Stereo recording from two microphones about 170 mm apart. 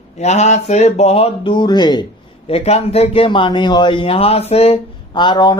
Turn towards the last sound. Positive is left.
turn(degrees=25)  # may be behind; listen again after turning